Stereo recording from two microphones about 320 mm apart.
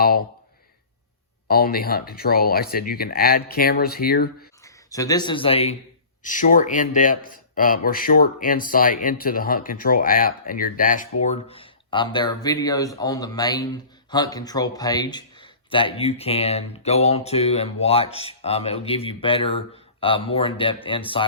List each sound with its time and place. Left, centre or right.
1.5 s speech: left
4.6 s speech: centre